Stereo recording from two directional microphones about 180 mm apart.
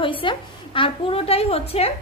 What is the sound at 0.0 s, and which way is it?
A woman's voice, 30° left (ahead or behind).